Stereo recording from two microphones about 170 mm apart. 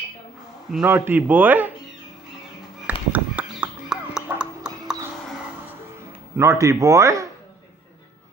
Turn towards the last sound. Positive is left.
turn(degrees=-20)  # may be behind; listen again after turning